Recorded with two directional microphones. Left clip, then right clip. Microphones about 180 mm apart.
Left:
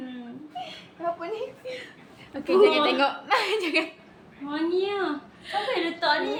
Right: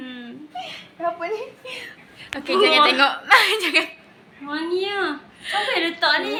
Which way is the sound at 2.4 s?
Centre (ahead or behind).